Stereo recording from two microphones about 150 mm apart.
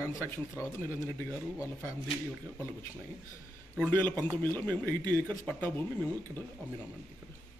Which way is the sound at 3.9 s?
10° left (ahead or behind).